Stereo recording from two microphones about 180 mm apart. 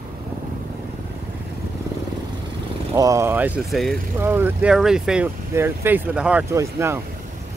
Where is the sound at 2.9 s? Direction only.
15° right (ahead or behind).